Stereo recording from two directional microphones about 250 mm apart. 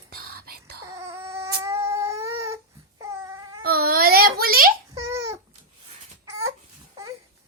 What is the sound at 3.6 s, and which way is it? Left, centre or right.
Baby cry, right.